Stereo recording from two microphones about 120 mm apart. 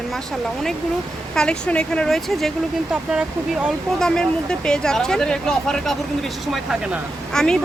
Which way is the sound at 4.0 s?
5° left (ahead or behind).